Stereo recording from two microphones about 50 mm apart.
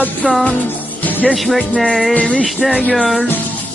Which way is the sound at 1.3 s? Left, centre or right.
Centre.